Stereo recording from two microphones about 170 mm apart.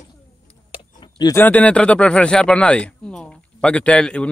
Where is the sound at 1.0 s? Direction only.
25° left (ahead or behind).